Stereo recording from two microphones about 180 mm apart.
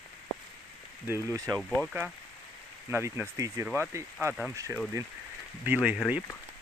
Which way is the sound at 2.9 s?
15° right (ahead or behind).